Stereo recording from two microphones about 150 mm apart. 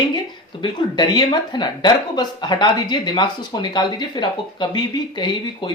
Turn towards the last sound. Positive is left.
turn(degrees=30)  # may be behind; listen again after turning